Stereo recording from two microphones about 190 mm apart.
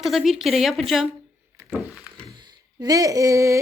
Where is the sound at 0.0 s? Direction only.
Centre (ahead or behind).